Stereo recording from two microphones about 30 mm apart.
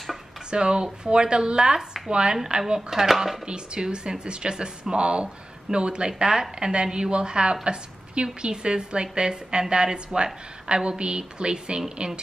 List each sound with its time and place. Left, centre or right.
0.5 s a woman's voice: right
2.9 s speech: centre
3.4 s a woman's voice: right